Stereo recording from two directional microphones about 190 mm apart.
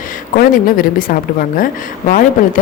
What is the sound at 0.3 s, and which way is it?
Speech, 45° left (ahead or behind).